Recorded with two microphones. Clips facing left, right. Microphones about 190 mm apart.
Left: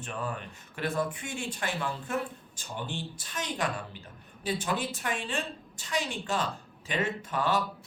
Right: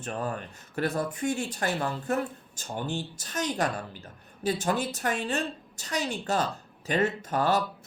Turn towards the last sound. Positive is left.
turn(degrees=-40)  # may be behind; listen again after turning